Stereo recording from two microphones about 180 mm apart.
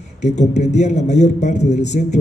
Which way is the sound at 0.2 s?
40° left (ahead or behind).